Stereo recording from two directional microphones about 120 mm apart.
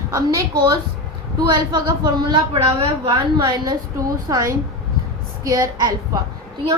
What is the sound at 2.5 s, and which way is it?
Speech, 55° right (ahead or behind).